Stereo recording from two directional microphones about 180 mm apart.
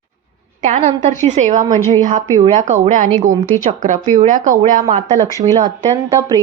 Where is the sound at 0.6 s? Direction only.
45° right (ahead or behind).